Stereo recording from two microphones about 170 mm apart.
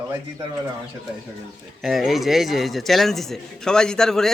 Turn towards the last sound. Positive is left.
turn(degrees=5)  # may be behind; listen again after turning